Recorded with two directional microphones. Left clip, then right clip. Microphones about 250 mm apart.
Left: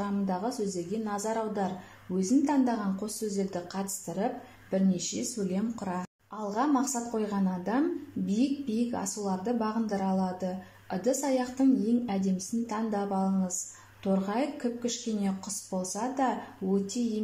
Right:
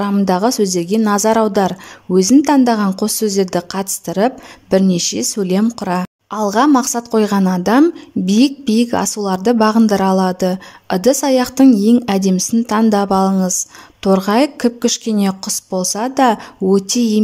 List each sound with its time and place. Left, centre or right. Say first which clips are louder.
0.0 s a woman's voice: right 17 dB; right